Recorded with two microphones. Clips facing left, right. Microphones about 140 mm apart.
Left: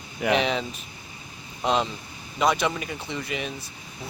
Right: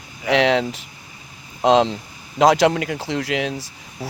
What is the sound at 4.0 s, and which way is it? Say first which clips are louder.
Speech: right 8 dB; 35° right (ahead or behind).